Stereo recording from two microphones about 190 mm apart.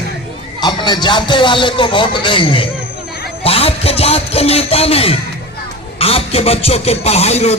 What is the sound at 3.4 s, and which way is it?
Music, 30° left (ahead or behind).